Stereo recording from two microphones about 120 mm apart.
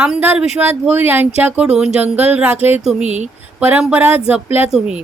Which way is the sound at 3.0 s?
75° right (ahead or behind).